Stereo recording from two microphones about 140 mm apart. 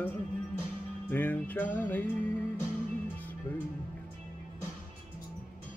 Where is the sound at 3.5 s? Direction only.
10° left (ahead or behind).